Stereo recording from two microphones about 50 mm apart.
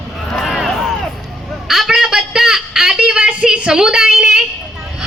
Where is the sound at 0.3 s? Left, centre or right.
Centre.